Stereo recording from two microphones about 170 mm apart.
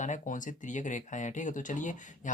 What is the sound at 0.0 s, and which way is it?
Speech, 50° left (ahead or behind).